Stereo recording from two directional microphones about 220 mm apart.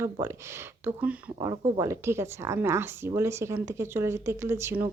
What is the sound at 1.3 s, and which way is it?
Speech, 20° right (ahead or behind).